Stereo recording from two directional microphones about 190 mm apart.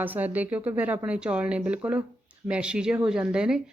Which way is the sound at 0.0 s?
10° right (ahead or behind).